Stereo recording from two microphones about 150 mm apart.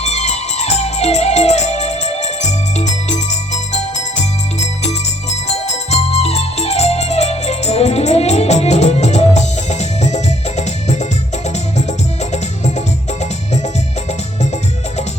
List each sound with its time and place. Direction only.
0.0 s music: 50° left (ahead or behind)
12.3 s music: 50° left (ahead or behind)